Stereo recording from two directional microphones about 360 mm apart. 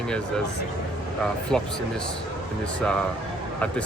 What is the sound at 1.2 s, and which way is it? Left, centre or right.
Speech, centre.